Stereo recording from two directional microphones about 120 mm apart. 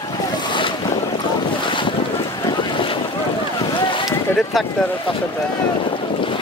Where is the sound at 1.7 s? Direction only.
45° left (ahead or behind).